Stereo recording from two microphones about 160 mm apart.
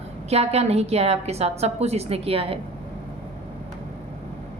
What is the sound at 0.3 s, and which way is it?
A woman's voice, 40° right (ahead or behind).